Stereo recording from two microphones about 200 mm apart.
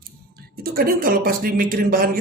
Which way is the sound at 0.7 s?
45° right (ahead or behind).